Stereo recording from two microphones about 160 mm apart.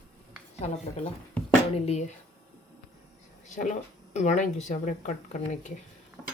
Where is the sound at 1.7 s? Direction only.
40° left (ahead or behind).